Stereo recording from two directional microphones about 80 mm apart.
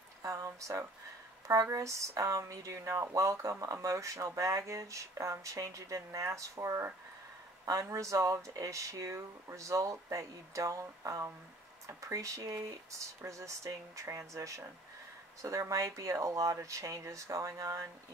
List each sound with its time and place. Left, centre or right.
0.2 s speech: right